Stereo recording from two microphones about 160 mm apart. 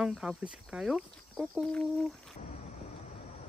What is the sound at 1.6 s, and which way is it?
Speech, 5° left (ahead or behind).